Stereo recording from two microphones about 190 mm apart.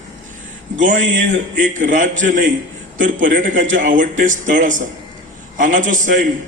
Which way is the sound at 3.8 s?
45° right (ahead or behind).